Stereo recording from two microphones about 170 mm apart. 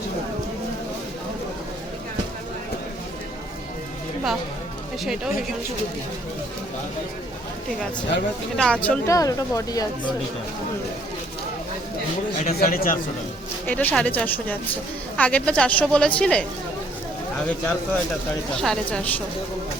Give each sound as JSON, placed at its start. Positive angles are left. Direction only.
{"t": 5.0, "sound": "a woman's voice", "side_deg": -5}
{"t": 8.5, "sound": "a woman's voice", "side_deg": 5}
{"t": 9.0, "sound": "speech", "side_deg": 20}
{"t": 12.4, "sound": "a man's voice", "side_deg": 60}
{"t": 13.7, "sound": "a woman's voice", "side_deg": 10}
{"t": 18.5, "sound": "a woman's voice", "side_deg": 5}